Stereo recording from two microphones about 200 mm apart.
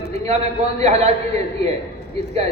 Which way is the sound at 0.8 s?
35° right (ahead or behind).